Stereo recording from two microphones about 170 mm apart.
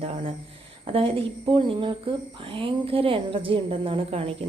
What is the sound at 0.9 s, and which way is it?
A woman's voice, 30° right (ahead or behind).